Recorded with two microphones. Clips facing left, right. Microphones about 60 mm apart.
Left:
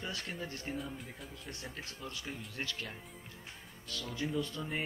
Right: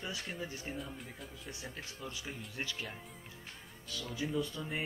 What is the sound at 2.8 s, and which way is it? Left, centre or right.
Music, centre.